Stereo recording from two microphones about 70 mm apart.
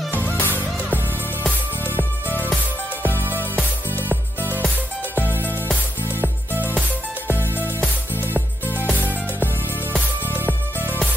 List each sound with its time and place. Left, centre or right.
0.1 s music: left
1.9 s music: left
3.5 s music: left
6.5 s music: right